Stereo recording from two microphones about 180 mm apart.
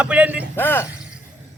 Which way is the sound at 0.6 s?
10° left (ahead or behind).